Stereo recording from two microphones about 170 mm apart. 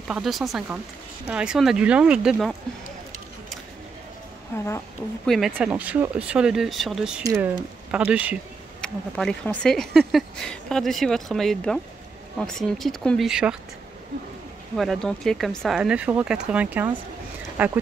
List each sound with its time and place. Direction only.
0.1 s speech: centre (ahead or behind)
4.5 s a sound: 15° left (ahead or behind)
5.2 s speech: centre (ahead or behind)
7.2 s speech: 20° right (ahead or behind)
7.9 s speech: 5° right (ahead or behind)
8.8 s speech: 5° left (ahead or behind)
14.8 s speech: centre (ahead or behind)